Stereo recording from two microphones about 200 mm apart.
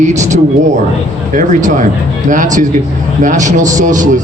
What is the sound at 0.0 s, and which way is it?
Speech, 35° right (ahead or behind).